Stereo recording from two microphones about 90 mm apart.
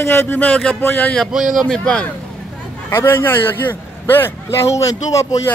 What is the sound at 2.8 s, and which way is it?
A man's voice, 25° left (ahead or behind).